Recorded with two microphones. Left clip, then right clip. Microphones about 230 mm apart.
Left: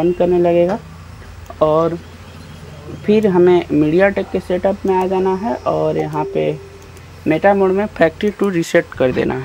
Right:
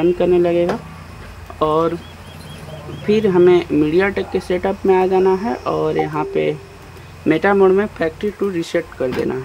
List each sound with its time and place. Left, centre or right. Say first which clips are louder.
0.0 s speech: left 1 dB; centre
3.1 s speech: left 1 dB; centre
8.0 s speech: left 5 dB; left